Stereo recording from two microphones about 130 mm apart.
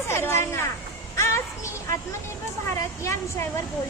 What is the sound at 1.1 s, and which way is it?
Child singing, 20° left (ahead or behind).